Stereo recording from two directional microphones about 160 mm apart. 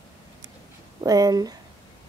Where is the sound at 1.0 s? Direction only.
25° right (ahead or behind).